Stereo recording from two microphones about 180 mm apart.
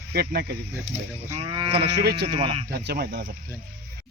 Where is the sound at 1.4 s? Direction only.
30° right (ahead or behind).